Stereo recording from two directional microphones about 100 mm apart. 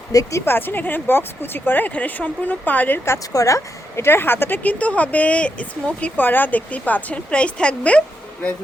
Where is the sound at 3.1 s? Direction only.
35° left (ahead or behind); by 8.0 s 10° left (ahead or behind).